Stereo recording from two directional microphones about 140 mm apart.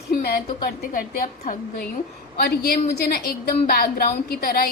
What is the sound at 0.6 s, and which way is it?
A woman's voice, 90° left.